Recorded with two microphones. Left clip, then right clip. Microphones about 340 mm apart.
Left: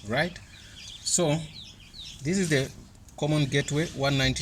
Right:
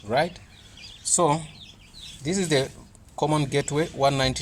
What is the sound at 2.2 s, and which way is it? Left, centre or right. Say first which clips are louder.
Speech: right 3 dB; centre.